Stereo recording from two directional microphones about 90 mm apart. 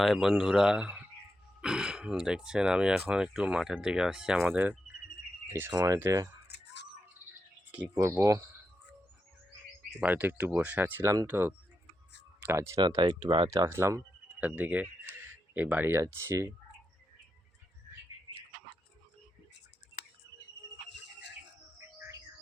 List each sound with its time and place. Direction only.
0.0 s speech: centre (ahead or behind)
4.4 s speech: 20° right (ahead or behind)
5.7 s speech: 40° right (ahead or behind)
7.9 s speech: 30° right (ahead or behind)
10.0 s speech: 20° right (ahead or behind)
12.5 s speech: 35° right (ahead or behind)
13.0 s speech: 65° right (ahead or behind)
13.7 s speech: 30° right (ahead or behind)
14.3 s speech: 15° right (ahead or behind)